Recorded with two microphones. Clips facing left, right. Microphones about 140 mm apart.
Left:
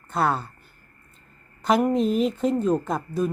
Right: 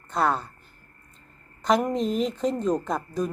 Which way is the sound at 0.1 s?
5° left (ahead or behind).